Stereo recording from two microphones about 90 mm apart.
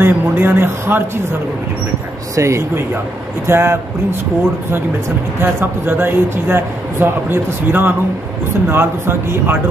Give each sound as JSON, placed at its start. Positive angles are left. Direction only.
{"t": 0.0, "sound": "a man's voice", "side_deg": -25}
{"t": 2.3, "sound": "speech", "side_deg": -30}
{"t": 5.4, "sound": "speech", "side_deg": -25}